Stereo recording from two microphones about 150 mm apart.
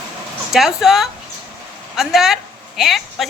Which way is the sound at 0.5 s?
5° right (ahead or behind).